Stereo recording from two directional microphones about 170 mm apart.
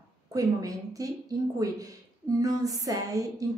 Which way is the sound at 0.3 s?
20° right (ahead or behind).